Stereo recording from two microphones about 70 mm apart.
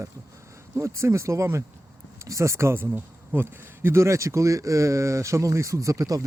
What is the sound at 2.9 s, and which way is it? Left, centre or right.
Speech, right.